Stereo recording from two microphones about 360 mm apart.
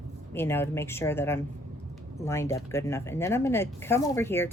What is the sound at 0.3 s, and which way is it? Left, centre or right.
A woman's voice, centre.